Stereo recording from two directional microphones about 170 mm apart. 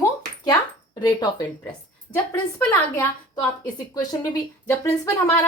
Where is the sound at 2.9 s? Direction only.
15° left (ahead or behind).